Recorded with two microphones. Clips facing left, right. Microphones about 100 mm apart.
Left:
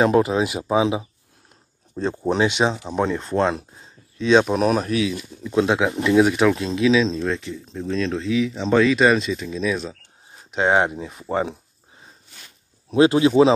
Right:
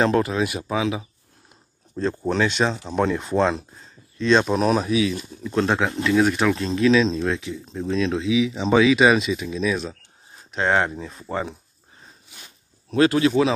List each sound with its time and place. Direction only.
0.0 s speech: 15° left (ahead or behind)
4.8 s speech: 5° right (ahead or behind)
5.5 s speech: 10° left (ahead or behind)
10.5 s speech: 15° left (ahead or behind)
11.2 s speech: 25° left (ahead or behind)
12.3 s a sound: 10° right (ahead or behind)
12.9 s speech: 20° left (ahead or behind)